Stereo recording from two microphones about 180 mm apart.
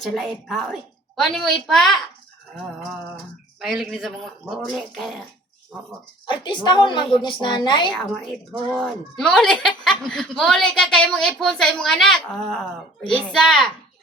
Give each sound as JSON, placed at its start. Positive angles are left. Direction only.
{"t": 0.0, "sound": "speech", "side_deg": 0}
{"t": 3.6, "sound": "speech", "side_deg": 0}
{"t": 6.2, "sound": "a woman's voice", "side_deg": 25}
{"t": 8.7, "sound": "speech", "side_deg": 0}